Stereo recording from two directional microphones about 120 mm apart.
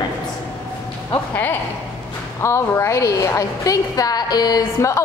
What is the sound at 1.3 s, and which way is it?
A woman's voice, 15° left (ahead or behind).